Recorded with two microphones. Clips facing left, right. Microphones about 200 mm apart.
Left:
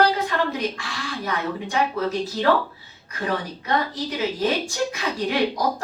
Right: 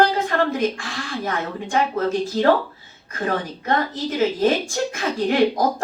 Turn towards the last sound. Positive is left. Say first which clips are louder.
# right 4 dB
turn(degrees=-50)  # may be behind; listen again after turning